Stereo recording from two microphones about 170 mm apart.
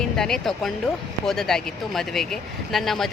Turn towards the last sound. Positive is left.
turn(degrees=0)  # may be behind; listen again after turning